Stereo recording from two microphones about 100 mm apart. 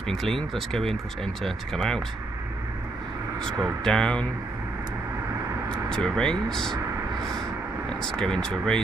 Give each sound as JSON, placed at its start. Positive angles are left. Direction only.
{"t": 0.1, "sound": "speech", "side_deg": 5}
{"t": 3.8, "sound": "speech", "side_deg": 10}
{"t": 5.7, "sound": "speech", "side_deg": 5}
{"t": 7.9, "sound": "speech", "side_deg": 5}